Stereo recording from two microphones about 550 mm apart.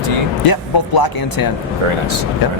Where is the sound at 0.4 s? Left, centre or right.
Left.